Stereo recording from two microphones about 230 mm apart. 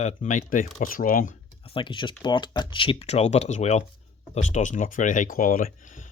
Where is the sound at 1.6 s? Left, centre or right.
Left.